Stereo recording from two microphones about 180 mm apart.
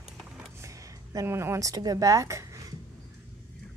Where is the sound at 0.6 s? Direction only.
15° right (ahead or behind).